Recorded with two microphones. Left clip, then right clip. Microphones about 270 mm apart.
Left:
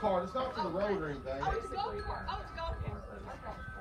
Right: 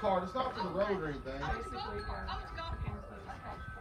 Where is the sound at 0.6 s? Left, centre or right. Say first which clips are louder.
Left 2 dB; centre.